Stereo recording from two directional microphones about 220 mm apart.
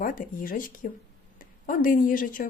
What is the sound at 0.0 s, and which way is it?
Speech, 40° left (ahead or behind).